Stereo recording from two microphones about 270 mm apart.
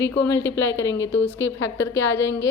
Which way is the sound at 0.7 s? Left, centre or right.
Left.